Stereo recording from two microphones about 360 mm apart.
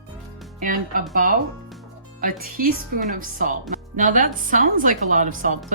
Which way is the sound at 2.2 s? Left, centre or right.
Right.